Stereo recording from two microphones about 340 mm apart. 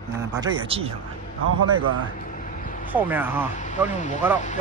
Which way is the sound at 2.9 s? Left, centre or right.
Centre.